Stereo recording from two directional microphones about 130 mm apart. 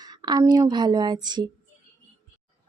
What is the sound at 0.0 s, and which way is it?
A woman's voice, 30° right (ahead or behind).